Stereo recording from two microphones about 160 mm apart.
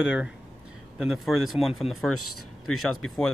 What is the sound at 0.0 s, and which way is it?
Speech, 5° right (ahead or behind).